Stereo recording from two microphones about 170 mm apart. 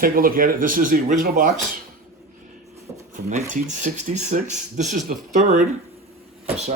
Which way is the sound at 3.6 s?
45° right (ahead or behind).